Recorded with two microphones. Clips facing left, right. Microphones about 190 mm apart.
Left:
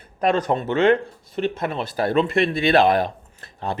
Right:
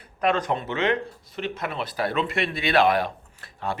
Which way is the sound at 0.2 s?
35° left (ahead or behind).